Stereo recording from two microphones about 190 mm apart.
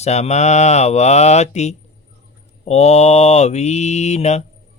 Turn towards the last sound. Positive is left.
turn(degrees=35)  # may be behind; listen again after turning